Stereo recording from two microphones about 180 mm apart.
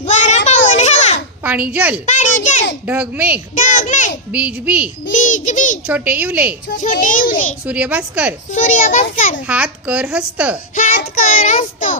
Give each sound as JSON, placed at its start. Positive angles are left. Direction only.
{"t": 0.0, "sound": "child singing", "side_deg": 40}
{"t": 1.5, "sound": "a child's voice", "side_deg": -10}
{"t": 2.0, "sound": "a sound", "side_deg": 40}
{"t": 2.8, "sound": "a child's voice", "side_deg": -10}
{"t": 3.5, "sound": "a sound", "side_deg": 45}
{"t": 4.3, "sound": "a child's voice", "side_deg": -5}
{"t": 5.1, "sound": "a child's voice", "side_deg": 45}
{"t": 5.9, "sound": "a child's voice", "side_deg": -10}
{"t": 6.7, "sound": "a child's voice", "side_deg": 45}
{"t": 7.7, "sound": "a child's voice", "side_deg": -10}
{"t": 8.5, "sound": "a child's voice", "side_deg": 45}
{"t": 9.5, "sound": "a child's voice", "side_deg": -5}
{"t": 10.8, "sound": "a child's voice", "side_deg": 50}